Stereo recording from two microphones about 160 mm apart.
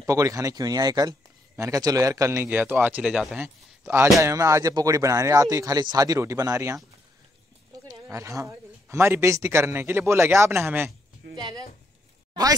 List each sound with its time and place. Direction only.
0.0 s speech: 20° right (ahead or behind); by 3.3 s 5° right (ahead or behind)
3.3 s speech: 15° right (ahead or behind)
7.9 s speech: 20° right (ahead or behind)
11.2 s a sound: 90° right